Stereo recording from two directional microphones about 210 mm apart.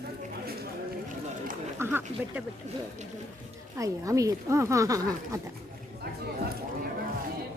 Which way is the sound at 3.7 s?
15° right (ahead or behind).